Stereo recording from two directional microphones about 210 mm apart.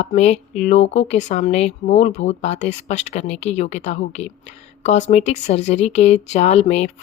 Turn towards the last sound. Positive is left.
turn(degrees=30)  # may be behind; listen again after turning